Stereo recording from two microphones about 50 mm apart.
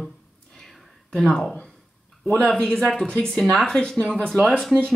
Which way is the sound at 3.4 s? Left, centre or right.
Centre.